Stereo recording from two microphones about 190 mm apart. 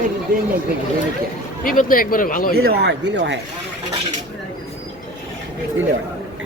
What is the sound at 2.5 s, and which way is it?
Speech, 55° right (ahead or behind).